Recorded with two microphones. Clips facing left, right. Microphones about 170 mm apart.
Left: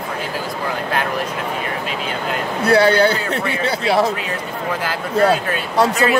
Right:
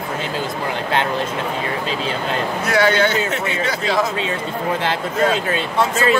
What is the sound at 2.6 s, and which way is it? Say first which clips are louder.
A man's voice: left 4 dB; 35° left (ahead or behind).